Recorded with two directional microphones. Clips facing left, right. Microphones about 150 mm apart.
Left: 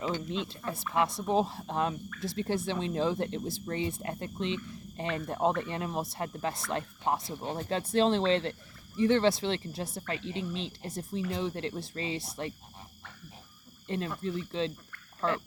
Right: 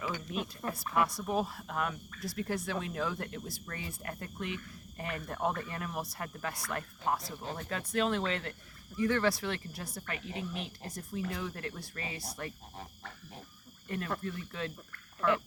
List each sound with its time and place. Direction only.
0.0 s speech: 25° left (ahead or behind)
13.8 s speech: 25° left (ahead or behind)